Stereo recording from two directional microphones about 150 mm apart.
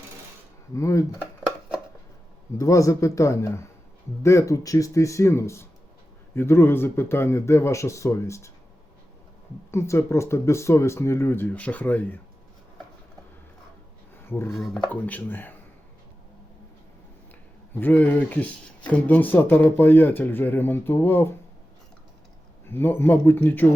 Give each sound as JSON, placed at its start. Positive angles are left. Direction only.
{"t": 0.7, "sound": "speech", "side_deg": 20}
{"t": 2.6, "sound": "speech", "side_deg": 20}
{"t": 9.7, "sound": "speech", "side_deg": 20}
{"t": 14.3, "sound": "speech", "side_deg": 15}
{"t": 14.5, "sound": "speech", "side_deg": 0}
{"t": 17.7, "sound": "speech", "side_deg": 10}
{"t": 22.7, "sound": "speech", "side_deg": 15}